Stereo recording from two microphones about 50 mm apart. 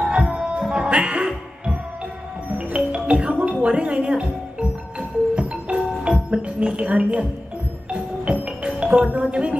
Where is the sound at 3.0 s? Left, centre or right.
Right.